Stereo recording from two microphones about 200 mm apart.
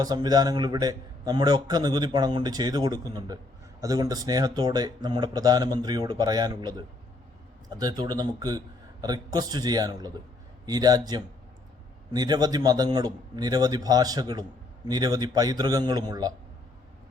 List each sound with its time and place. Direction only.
0.0 s a man's voice: 20° right (ahead or behind)